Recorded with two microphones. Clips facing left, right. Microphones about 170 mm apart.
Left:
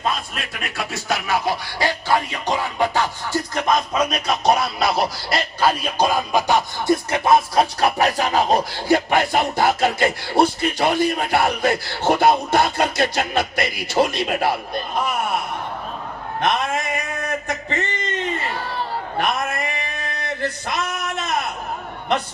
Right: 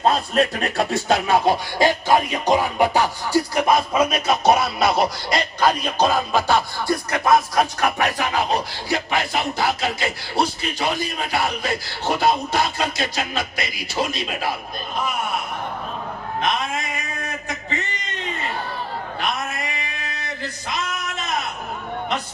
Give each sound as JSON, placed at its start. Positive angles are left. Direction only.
{"t": 0.0, "sound": "speech", "side_deg": -35}
{"t": 1.1, "sound": "music", "side_deg": -20}
{"t": 16.4, "sound": "a sound", "side_deg": 55}
{"t": 18.7, "sound": "chatter", "side_deg": 65}
{"t": 20.4, "sound": "male singing", "side_deg": 60}